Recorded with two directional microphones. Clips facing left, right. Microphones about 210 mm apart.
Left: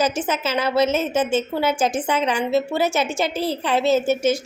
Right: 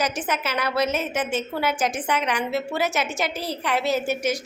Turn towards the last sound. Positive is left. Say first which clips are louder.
# left 6 dB
turn(degrees=25)  # may be behind; listen again after turning